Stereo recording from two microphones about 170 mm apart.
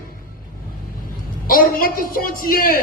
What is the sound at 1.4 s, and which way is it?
Speech, 60° left (ahead or behind).